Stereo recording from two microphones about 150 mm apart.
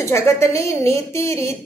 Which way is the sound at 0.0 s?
20° left (ahead or behind).